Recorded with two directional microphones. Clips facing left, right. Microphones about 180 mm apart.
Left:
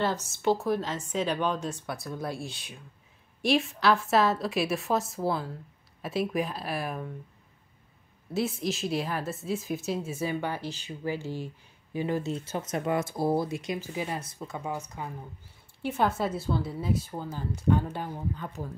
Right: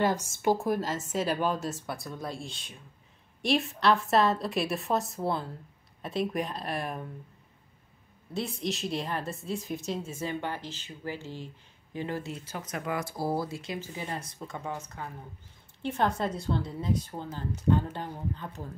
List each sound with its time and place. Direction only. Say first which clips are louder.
0.0 s a woman's voice: right 1 dB; 10° right (ahead or behind)
8.3 s a woman's voice: left 3 dB; 5° left (ahead or behind)